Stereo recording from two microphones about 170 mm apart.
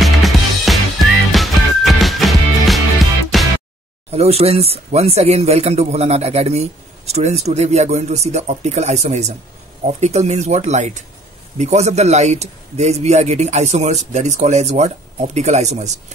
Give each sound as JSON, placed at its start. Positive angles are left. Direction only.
{"t": 0.0, "sound": "music", "side_deg": 0}
{"t": 4.1, "sound": "speech", "side_deg": -35}